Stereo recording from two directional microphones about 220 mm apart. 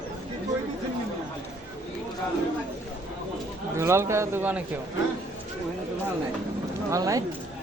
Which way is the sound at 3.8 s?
10° right (ahead or behind).